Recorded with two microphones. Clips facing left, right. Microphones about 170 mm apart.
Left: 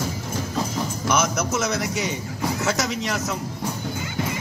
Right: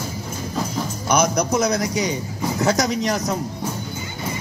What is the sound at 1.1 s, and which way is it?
Speech, 35° right (ahead or behind).